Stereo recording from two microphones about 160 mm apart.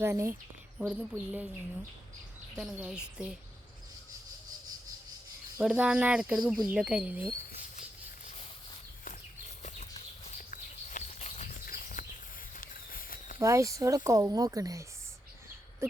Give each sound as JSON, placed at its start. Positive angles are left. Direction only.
{"t": 0.0, "sound": "speech", "side_deg": -15}
{"t": 5.5, "sound": "speech", "side_deg": -10}
{"t": 9.6, "sound": "a sound", "side_deg": 45}
{"t": 11.6, "sound": "patter", "side_deg": 65}
{"t": 12.5, "sound": "a sound", "side_deg": 65}
{"t": 13.4, "sound": "speech", "side_deg": -20}